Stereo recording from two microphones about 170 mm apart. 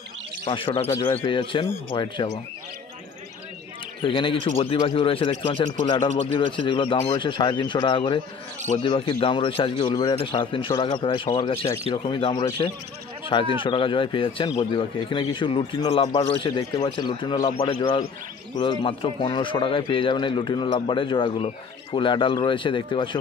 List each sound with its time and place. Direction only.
0.5 s a man's voice: 35° left (ahead or behind)
0.9 s speech: 10° left (ahead or behind)
1.2 s a man's voice: 30° left (ahead or behind)
4.0 s a man's voice: 30° left (ahead or behind)